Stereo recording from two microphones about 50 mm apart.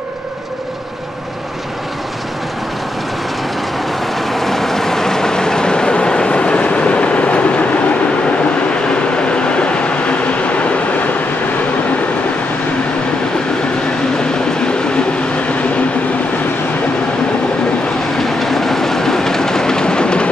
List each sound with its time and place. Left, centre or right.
4.3 s vehicle: centre; by 7.8 s left
9.3 s train: left
18.4 s train: centre